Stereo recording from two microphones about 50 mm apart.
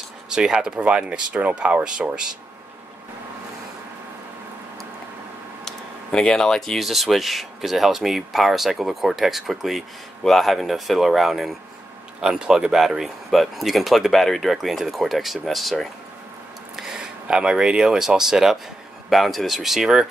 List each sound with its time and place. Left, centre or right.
0.3 s speech: centre
5.7 s a sound: centre
6.8 s speech: centre
12.2 s speech: centre
16.7 s speech: centre